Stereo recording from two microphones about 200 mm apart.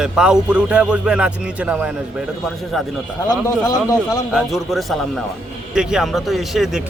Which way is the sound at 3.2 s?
15° left (ahead or behind).